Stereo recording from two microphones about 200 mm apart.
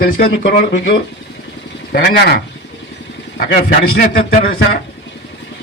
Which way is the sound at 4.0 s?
50° left (ahead or behind).